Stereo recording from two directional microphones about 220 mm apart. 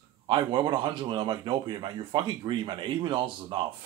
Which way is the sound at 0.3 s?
20° right (ahead or behind).